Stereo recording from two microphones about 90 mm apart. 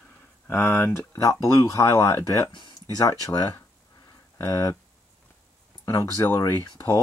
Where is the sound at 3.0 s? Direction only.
40° left (ahead or behind).